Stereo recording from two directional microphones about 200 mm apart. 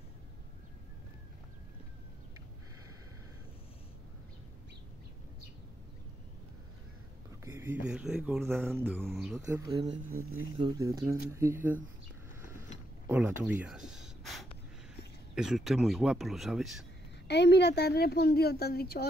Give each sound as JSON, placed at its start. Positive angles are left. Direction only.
{"t": 7.4, "sound": "speech", "side_deg": -10}
{"t": 9.5, "sound": "speech", "side_deg": -20}
{"t": 13.0, "sound": "speech", "side_deg": -10}
{"t": 17.3, "sound": "a woman's voice", "side_deg": 55}